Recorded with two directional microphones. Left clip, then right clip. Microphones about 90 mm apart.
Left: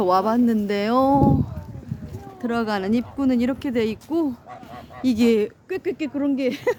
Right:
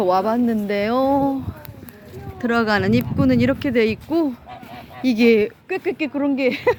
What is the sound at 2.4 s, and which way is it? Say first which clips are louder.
Speech: right 5 dB; 10° right (ahead or behind).